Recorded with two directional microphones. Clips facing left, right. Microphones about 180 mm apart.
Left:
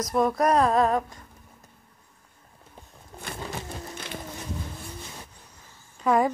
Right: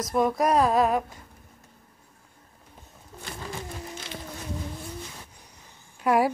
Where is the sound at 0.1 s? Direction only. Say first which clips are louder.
Even; centre (ahead or behind).